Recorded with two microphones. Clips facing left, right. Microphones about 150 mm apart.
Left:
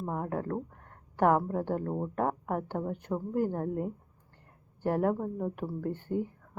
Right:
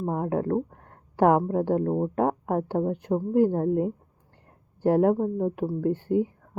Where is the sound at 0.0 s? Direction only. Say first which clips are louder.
Right 6 dB; 40° right (ahead or behind).